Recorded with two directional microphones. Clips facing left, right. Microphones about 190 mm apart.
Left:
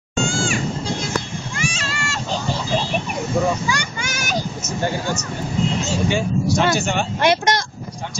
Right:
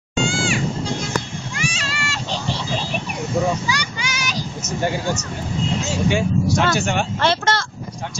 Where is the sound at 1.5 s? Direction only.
45° left (ahead or behind).